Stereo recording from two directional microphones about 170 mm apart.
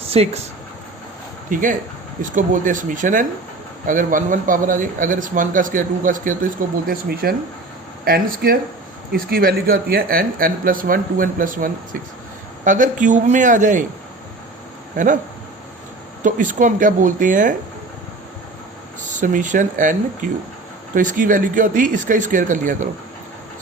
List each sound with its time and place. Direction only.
0.0 s speech: 35° right (ahead or behind)
1.5 s a man's voice: 50° right (ahead or behind)
14.9 s a man's voice: 50° right (ahead or behind)
16.2 s a man's voice: 50° right (ahead or behind)
19.1 s a man's voice: 50° right (ahead or behind)